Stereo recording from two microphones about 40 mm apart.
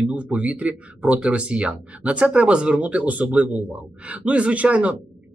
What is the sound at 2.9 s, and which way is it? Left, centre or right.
Speech, right.